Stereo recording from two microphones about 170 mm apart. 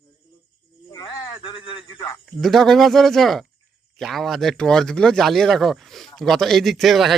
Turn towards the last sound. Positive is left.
turn(degrees=0)  # may be behind; listen again after turning